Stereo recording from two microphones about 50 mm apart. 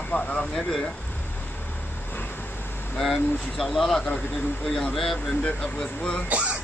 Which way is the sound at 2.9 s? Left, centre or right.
Centre.